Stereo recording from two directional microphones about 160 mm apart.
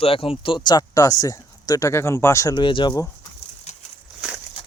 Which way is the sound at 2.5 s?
30° left (ahead or behind).